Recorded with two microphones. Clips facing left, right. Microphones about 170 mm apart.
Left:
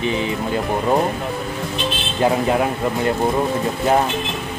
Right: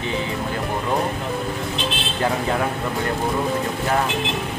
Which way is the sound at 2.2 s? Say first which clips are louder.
Left 5 dB; 20° left (ahead or behind).